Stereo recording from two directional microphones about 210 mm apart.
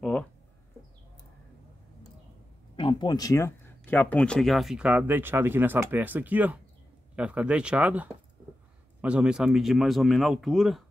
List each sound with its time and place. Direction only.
2.7 s speech: 25° left (ahead or behind); by 10.8 s centre (ahead or behind)